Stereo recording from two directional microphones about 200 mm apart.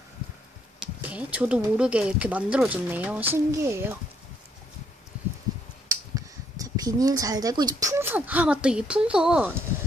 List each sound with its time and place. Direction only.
0.7 s speech: 5° right (ahead or behind)
5.9 s speech: 15° right (ahead or behind)